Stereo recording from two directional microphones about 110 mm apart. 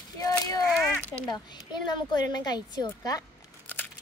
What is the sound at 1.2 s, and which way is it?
Speech, 40° left (ahead or behind).